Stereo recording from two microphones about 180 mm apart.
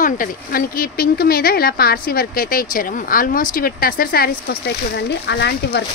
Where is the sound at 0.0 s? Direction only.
50° left (ahead or behind).